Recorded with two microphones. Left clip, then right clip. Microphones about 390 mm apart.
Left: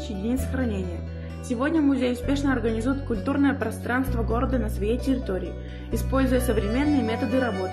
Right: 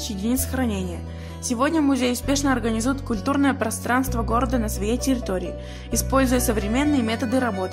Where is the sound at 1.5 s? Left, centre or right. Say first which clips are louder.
Right 2 dB; right.